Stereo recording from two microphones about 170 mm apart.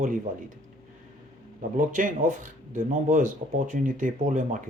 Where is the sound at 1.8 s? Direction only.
50° right (ahead or behind).